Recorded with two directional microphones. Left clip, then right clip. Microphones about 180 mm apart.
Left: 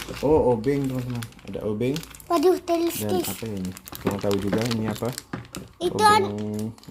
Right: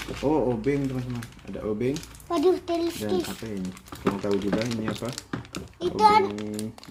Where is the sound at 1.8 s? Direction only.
35° left (ahead or behind).